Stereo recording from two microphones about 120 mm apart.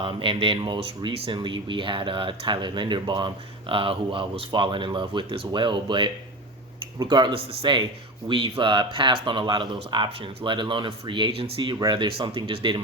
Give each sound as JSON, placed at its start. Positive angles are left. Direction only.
{"t": 0.0, "sound": "a man's voice", "side_deg": -45}